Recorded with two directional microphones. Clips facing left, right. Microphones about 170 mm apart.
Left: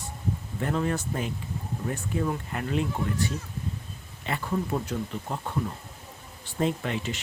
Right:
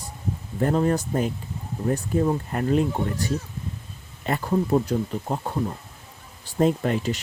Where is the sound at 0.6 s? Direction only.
40° right (ahead or behind).